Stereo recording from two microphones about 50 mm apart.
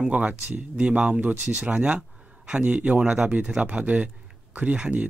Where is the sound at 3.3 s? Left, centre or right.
Right.